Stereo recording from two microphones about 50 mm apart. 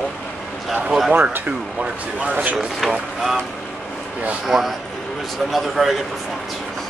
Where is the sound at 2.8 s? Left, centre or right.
Centre.